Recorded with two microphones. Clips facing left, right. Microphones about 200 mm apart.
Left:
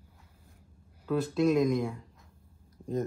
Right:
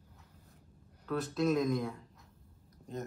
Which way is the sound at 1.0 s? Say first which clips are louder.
Left 5 dB; centre (ahead or behind).